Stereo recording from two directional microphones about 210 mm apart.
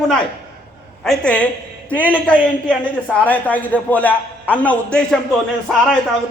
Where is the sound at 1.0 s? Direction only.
5° left (ahead or behind).